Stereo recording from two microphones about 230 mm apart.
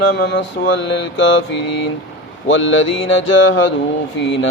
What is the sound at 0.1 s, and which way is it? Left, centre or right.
Speech, left.